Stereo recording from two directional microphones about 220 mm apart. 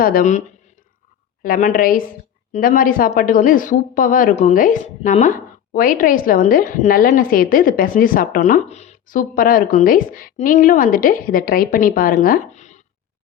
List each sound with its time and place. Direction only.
0.0 s speech: 40° left (ahead or behind)